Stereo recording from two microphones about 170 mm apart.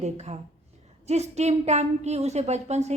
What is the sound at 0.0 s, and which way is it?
A woman's voice, 40° right (ahead or behind).